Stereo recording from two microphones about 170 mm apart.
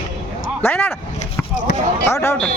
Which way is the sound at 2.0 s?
15° left (ahead or behind).